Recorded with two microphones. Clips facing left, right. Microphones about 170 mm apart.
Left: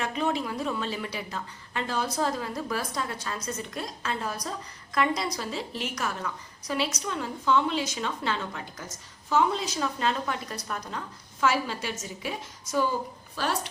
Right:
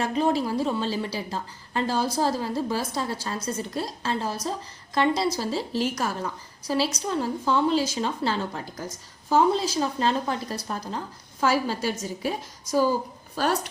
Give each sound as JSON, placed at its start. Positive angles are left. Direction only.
{"t": 0.0, "sound": "a woman's voice", "side_deg": -35}